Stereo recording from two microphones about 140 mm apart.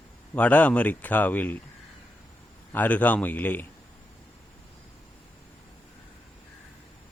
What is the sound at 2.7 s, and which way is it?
Speech, 10° left (ahead or behind).